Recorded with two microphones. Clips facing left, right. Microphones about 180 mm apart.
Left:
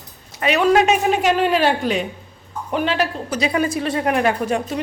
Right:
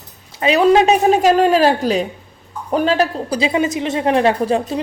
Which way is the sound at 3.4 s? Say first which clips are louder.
Right 2 dB; 20° right (ahead or behind).